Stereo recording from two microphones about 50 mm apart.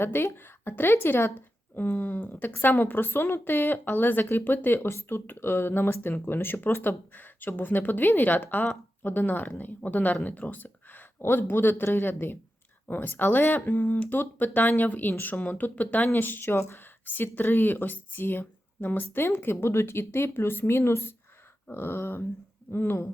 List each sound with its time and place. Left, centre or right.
0.0 s speech: left
4.9 s speech: left
11.2 s speech: left